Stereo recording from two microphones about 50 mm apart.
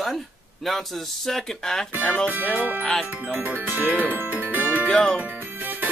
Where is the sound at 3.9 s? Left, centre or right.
Right.